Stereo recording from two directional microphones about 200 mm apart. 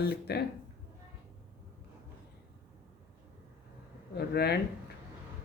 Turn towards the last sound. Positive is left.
turn(degrees=55)  # may be behind; listen again after turning